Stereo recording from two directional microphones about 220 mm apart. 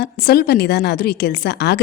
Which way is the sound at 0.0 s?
45° left (ahead or behind).